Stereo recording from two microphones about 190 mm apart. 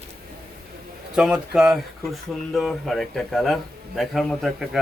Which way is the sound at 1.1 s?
5° right (ahead or behind).